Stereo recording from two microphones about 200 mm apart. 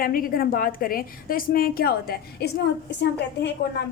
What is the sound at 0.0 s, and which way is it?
A woman's voice, 45° left (ahead or behind).